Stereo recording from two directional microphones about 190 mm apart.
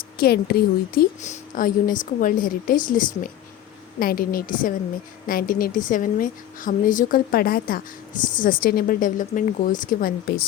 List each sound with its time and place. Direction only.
0.2 s speech: 55° left (ahead or behind)
0.9 s a woman's voice: 45° left (ahead or behind)